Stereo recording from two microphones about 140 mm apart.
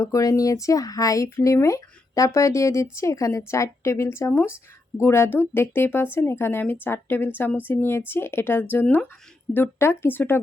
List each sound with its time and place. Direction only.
0.0 s speech: 25° left (ahead or behind)